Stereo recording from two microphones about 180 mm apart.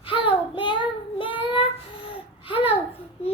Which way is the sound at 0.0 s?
30° left (ahead or behind).